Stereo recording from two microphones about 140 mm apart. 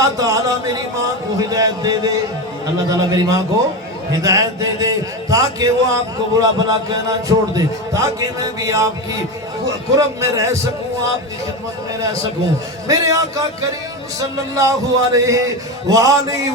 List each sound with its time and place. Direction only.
0.0 s a man's voice: 25° right (ahead or behind)
9.9 s a man's voice: 20° right (ahead or behind)
12.9 s a man's voice: 25° right (ahead or behind)